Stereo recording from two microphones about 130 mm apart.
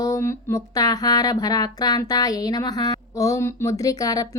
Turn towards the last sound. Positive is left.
turn(degrees=30)  # may be behind; listen again after turning